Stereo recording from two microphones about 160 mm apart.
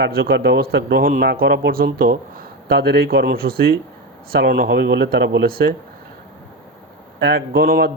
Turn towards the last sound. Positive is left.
turn(degrees=-70)  # may be behind; listen again after turning